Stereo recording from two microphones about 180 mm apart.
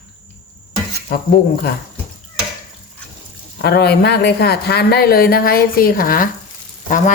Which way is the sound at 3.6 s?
65° left (ahead or behind).